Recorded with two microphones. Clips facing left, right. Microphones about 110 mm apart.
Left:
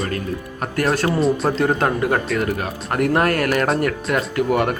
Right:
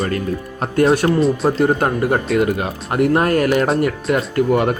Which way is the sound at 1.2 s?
5° right (ahead or behind).